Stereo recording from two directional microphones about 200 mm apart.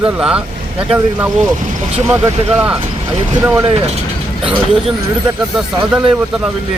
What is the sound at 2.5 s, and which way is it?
Speech, 5° right (ahead or behind).